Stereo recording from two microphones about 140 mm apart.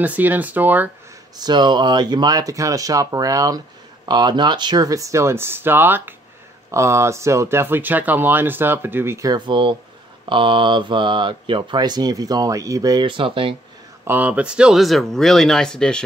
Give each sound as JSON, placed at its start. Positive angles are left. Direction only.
{"t": 0.0, "sound": "speech", "side_deg": -10}
{"t": 1.3, "sound": "speech", "side_deg": -30}
{"t": 9.5, "sound": "speech", "side_deg": -35}
{"t": 14.0, "sound": "speech", "side_deg": -10}